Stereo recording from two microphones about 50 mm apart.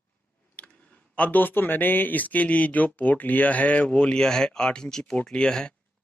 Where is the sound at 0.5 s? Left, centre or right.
Left.